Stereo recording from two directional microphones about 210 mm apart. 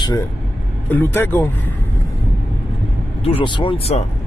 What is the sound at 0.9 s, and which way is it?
Speech, 10° left (ahead or behind).